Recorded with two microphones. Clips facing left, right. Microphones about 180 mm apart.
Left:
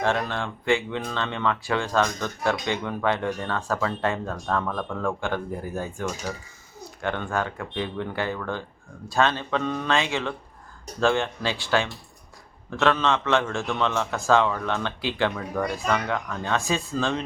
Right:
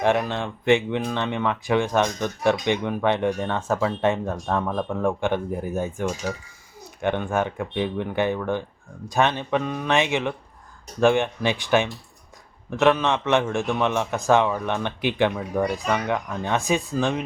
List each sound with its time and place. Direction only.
0.0 s speech: 15° right (ahead or behind)